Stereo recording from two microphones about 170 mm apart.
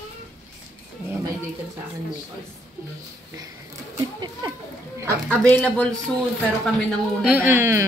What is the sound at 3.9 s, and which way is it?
Speech, 20° right (ahead or behind).